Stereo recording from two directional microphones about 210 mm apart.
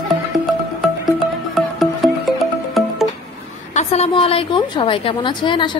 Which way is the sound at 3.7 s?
30° left (ahead or behind).